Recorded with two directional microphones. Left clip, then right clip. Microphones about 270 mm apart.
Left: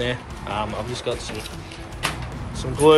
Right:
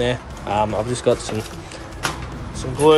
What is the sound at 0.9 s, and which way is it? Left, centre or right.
Speech, right.